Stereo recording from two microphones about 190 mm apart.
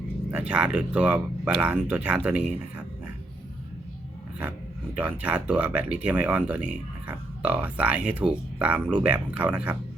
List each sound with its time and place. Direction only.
0.3 s speech: 5° right (ahead or behind)
4.9 s speech: 10° right (ahead or behind)